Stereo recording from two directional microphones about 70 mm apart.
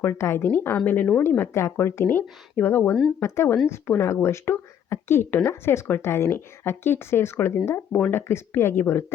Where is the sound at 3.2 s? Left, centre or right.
Left.